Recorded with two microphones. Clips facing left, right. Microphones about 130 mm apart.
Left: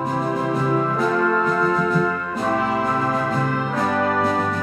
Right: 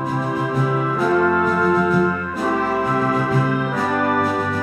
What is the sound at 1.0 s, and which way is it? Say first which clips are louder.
Music: right 2 dB; 5° right (ahead or behind).